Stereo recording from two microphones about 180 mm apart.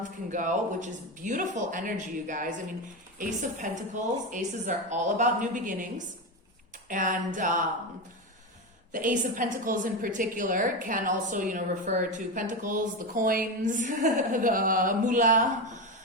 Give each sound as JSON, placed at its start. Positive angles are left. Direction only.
{"t": 0.3, "sound": "a woman's voice", "side_deg": -45}
{"t": 8.9, "sound": "a woman's voice", "side_deg": -45}